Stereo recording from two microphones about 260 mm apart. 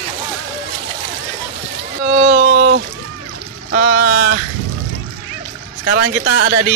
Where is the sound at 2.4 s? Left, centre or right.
Right.